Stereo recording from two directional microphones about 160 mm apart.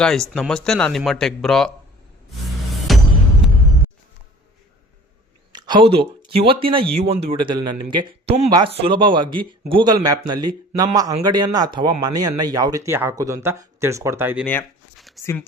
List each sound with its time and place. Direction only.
0.0 s a man's voice: 5° left (ahead or behind)
2.7 s music: centre (ahead or behind)
5.5 s speech: 25° right (ahead or behind)
14.4 s a sound: 5° left (ahead or behind)
15.2 s speech: 15° left (ahead or behind)